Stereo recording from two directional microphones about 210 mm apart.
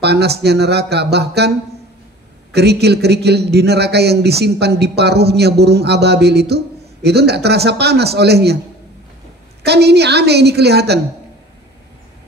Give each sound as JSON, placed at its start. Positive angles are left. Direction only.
{"t": 0.0, "sound": "a man's voice", "side_deg": -50}
{"t": 2.5, "sound": "a man's voice", "side_deg": -50}
{"t": 9.6, "sound": "a man's voice", "side_deg": -50}